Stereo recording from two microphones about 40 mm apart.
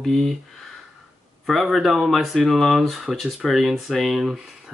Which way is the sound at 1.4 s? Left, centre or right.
Centre.